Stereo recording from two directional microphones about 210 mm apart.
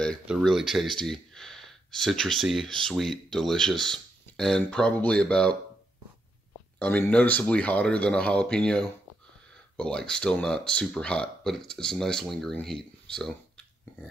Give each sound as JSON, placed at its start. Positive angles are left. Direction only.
{"t": 0.0, "sound": "speech", "side_deg": 5}
{"t": 6.8, "sound": "speech", "side_deg": 5}